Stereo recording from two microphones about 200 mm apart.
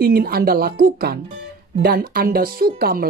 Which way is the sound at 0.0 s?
50° right (ahead or behind).